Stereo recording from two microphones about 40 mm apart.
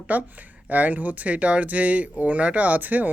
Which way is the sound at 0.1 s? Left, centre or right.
Right.